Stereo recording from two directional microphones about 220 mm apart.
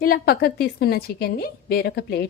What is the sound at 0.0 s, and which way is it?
A woman's voice, 45° left (ahead or behind).